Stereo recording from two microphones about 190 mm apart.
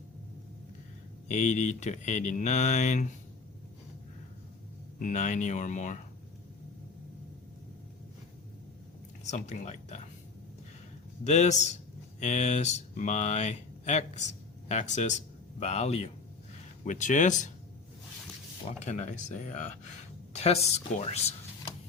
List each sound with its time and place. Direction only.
1.3 s speech: 40° left (ahead or behind)
4.9 s speech: 40° left (ahead or behind)
9.2 s speech: 35° left (ahead or behind)
11.2 s speech: 35° left (ahead or behind)
18.9 s speech: 40° left (ahead or behind)